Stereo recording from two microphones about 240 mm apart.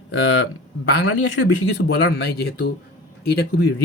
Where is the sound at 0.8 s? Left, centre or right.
Left.